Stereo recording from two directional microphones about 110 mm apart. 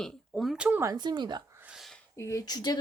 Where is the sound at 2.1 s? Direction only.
25° left (ahead or behind).